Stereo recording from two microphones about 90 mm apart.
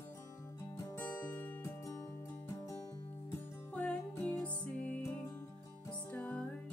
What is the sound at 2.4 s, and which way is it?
Music, 35° left (ahead or behind).